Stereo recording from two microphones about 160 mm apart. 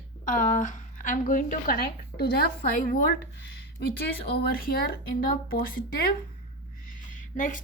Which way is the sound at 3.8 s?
90° left.